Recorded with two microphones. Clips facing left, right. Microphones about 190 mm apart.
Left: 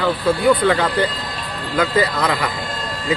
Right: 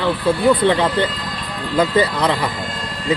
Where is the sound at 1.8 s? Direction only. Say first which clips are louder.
Right 2 dB; 25° right (ahead or behind).